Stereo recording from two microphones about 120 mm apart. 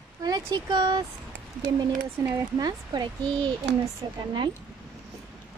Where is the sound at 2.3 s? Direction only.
35° right (ahead or behind).